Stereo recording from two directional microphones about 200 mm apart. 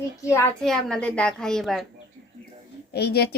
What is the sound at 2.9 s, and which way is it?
Speech, 55° left (ahead or behind).